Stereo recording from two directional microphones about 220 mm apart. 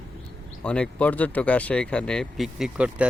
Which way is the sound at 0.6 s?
5° left (ahead or behind).